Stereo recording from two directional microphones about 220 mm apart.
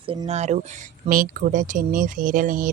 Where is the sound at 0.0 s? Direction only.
25° right (ahead or behind).